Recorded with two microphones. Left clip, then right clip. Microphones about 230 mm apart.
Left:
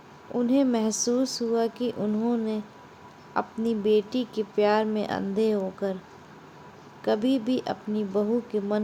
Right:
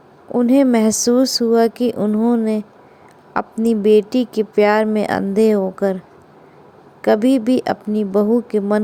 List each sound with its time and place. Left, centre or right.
0.3 s speech: right
7.0 s speech: right